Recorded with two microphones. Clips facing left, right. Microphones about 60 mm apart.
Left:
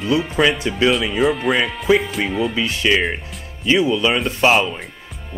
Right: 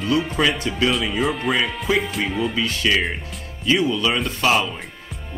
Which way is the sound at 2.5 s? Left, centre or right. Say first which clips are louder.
Left 2 dB; left.